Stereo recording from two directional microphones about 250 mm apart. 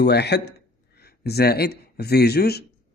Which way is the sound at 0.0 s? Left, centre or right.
Left.